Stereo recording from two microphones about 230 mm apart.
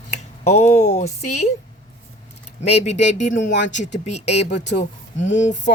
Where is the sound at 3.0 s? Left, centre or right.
Left.